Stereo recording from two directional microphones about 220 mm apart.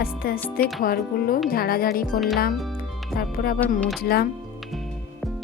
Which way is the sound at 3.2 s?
45° left (ahead or behind).